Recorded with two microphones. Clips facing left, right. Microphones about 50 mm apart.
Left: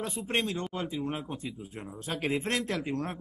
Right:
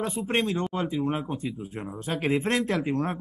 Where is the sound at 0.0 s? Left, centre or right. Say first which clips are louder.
Right 5 dB; centre.